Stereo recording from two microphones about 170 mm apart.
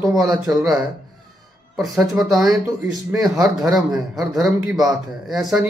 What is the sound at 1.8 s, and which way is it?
Speech, centre (ahead or behind).